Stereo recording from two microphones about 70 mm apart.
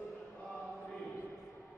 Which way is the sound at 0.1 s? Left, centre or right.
Centre.